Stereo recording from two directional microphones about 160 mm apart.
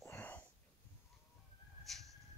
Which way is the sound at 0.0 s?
10° left (ahead or behind).